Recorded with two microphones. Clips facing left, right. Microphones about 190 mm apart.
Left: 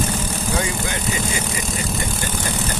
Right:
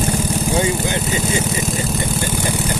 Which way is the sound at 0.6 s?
25° right (ahead or behind).